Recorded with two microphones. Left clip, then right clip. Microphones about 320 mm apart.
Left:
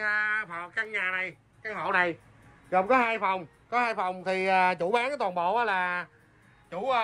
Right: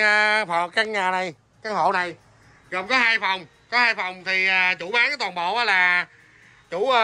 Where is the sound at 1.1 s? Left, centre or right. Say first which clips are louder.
Right 7 dB; right.